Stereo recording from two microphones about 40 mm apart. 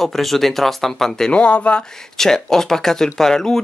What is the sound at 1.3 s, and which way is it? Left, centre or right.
Speech, left.